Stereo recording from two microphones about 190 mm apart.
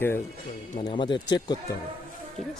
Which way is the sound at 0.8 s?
25° left (ahead or behind).